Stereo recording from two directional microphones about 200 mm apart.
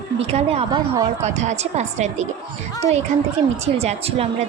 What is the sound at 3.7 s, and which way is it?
Speech, 30° right (ahead or behind).